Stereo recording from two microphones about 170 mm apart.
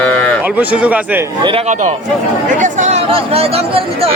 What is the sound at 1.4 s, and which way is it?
A man's voice, 40° right (ahead or behind).